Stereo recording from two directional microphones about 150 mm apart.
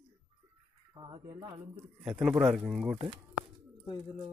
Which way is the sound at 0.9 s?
30° right (ahead or behind).